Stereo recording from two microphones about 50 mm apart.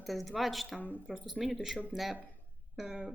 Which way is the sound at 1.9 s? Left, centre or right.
Centre.